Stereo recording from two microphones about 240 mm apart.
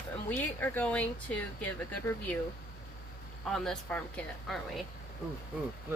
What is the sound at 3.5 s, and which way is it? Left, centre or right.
Speech, centre.